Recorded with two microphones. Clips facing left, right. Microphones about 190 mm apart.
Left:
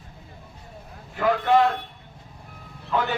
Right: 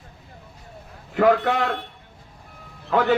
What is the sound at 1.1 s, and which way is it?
Speech, 70° right (ahead or behind).